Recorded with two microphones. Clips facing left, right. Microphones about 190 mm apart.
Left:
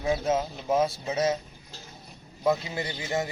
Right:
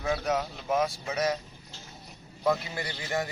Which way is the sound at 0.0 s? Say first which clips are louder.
Left 3 dB; 20° left (ahead or behind).